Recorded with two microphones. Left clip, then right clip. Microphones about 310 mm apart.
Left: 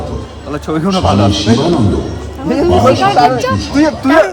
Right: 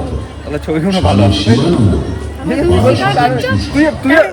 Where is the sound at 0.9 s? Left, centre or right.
Left.